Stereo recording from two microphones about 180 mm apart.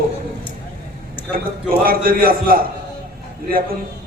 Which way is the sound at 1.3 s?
55° right (ahead or behind).